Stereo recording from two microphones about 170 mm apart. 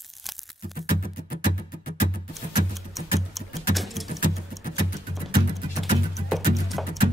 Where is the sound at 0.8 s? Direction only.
60° left (ahead or behind).